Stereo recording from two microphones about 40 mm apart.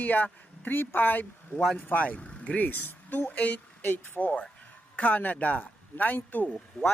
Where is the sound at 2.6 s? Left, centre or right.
Left.